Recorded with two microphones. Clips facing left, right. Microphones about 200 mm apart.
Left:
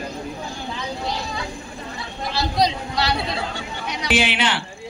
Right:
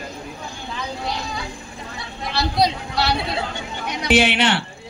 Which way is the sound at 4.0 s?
65° right (ahead or behind).